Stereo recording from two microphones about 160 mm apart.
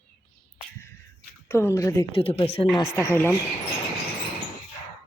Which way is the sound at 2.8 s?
15° left (ahead or behind).